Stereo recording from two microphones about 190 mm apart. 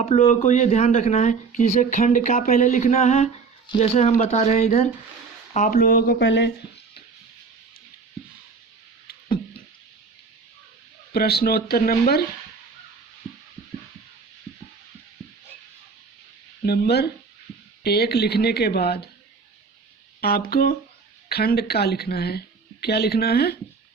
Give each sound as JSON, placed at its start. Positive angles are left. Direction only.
{"t": 0.0, "sound": "speech", "side_deg": 35}
{"t": 6.2, "sound": "speech", "side_deg": 65}
{"t": 11.1, "sound": "speech", "side_deg": 55}
{"t": 16.6, "sound": "speech", "side_deg": 55}
{"t": 20.5, "sound": "speech", "side_deg": 50}